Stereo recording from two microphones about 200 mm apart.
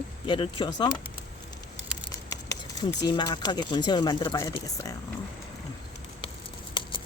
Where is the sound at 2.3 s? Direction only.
15° left (ahead or behind).